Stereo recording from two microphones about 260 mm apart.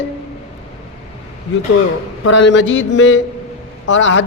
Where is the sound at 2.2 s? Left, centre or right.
Left.